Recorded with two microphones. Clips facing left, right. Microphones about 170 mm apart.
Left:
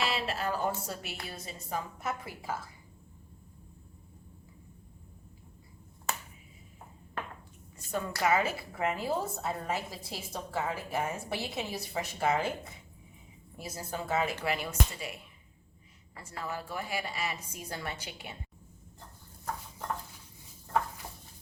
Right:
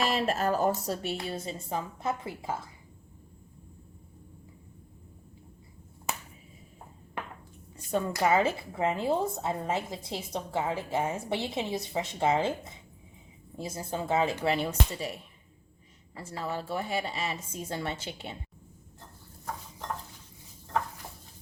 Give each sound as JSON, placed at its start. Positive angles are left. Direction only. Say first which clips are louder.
{"t": 0.0, "sound": "a woman's voice", "louder": "right 5 dB", "side_deg": -45}
{"t": 7.9, "sound": "speech", "louder": "right 3 dB", "side_deg": -30}